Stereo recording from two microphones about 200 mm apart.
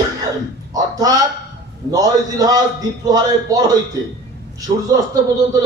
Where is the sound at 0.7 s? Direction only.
20° right (ahead or behind).